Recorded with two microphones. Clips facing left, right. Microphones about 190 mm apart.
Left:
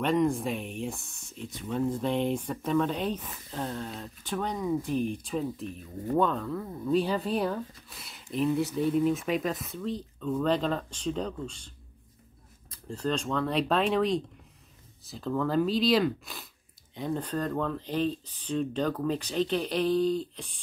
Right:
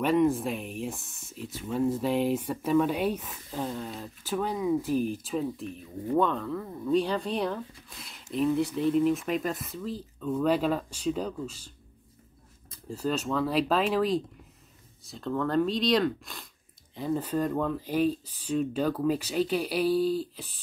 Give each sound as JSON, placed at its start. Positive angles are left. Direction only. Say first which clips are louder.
{"t": 0.0, "sound": "speech", "louder": "right 2 dB", "side_deg": -5}
{"t": 12.8, "sound": "speech", "louder": "right 1 dB", "side_deg": -5}